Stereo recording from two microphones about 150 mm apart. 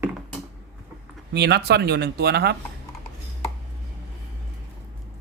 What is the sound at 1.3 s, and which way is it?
Speech, 90° right.